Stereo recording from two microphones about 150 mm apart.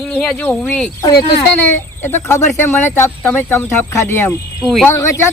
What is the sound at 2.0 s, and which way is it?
Speech, 15° left (ahead or behind).